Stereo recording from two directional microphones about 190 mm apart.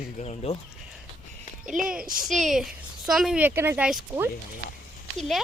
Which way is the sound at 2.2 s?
Centre (ahead or behind).